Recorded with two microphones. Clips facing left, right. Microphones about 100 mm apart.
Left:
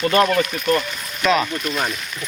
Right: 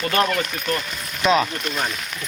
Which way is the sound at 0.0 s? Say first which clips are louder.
Left 4 dB; 30° left (ahead or behind).